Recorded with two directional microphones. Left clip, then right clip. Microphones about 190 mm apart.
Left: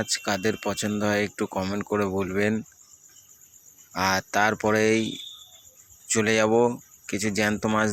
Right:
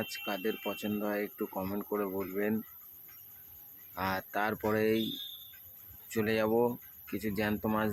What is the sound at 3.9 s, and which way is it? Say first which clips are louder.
Speech: left 10 dB; 25° left (ahead or behind).